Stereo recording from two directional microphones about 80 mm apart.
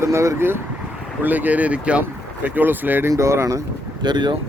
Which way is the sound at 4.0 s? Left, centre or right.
Right.